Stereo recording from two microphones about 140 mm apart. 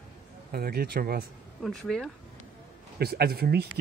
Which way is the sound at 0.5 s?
90° right.